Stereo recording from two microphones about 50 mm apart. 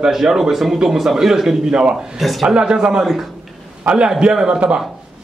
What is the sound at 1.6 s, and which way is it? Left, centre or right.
Speech, centre.